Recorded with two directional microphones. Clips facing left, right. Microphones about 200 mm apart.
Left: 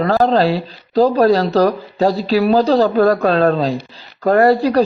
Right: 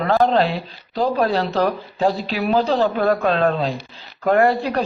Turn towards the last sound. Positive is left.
turn(degrees=35)  # may be behind; listen again after turning